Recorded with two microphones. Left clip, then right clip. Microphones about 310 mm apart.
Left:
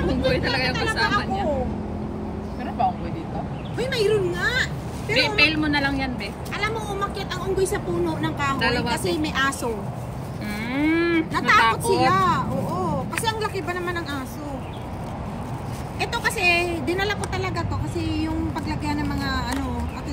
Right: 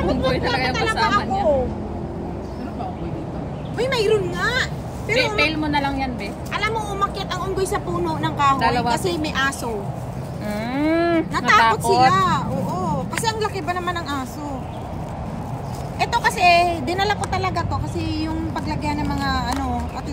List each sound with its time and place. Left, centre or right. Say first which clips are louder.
0.0 s vehicle: right 2 dB; centre
3.7 s a woman's voice: right 3 dB; right; by 9.6 s centre
10.5 s speech: right 2 dB; right
11.3 s speech: right 2 dB; centre
16.0 s speech: right 5 dB; centre